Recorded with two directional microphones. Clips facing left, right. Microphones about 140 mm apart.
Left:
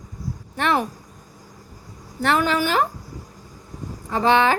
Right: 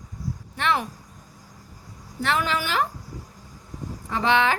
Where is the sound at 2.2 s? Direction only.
50° left (ahead or behind).